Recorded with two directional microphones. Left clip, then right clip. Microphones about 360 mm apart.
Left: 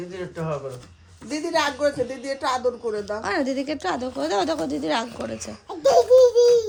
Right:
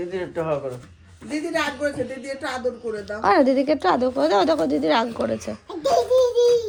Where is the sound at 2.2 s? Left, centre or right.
Centre.